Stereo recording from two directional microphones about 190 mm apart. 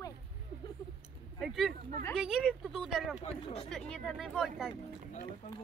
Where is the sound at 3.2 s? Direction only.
30° left (ahead or behind).